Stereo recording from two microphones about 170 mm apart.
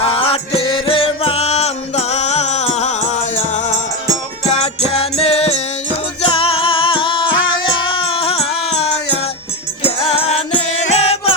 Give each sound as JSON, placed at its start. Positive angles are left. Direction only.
{"t": 0.0, "sound": "music", "side_deg": 35}